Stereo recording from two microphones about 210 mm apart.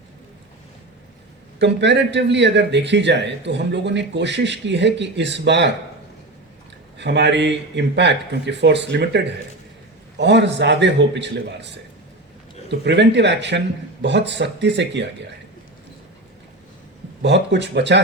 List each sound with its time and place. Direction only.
1.5 s a man's voice: 55° right (ahead or behind)
7.0 s a man's voice: 55° right (ahead or behind)
12.8 s a man's voice: 55° right (ahead or behind)
17.2 s a man's voice: 55° right (ahead or behind)